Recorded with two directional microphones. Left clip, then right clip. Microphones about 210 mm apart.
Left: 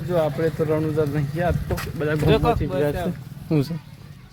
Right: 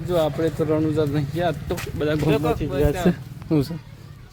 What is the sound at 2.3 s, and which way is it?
Speech, 50° left (ahead or behind).